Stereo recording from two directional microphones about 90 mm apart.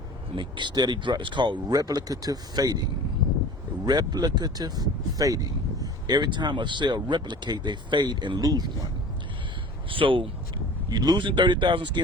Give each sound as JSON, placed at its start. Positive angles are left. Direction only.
{"t": 0.3, "sound": "speech", "side_deg": -60}
{"t": 1.7, "sound": "speech", "side_deg": -45}
{"t": 3.8, "sound": "speech", "side_deg": -50}
{"t": 9.9, "sound": "speech", "side_deg": -75}
{"t": 10.8, "sound": "speech", "side_deg": -45}